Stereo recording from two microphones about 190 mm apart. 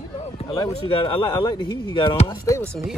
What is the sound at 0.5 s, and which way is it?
Speech, 30° left (ahead or behind).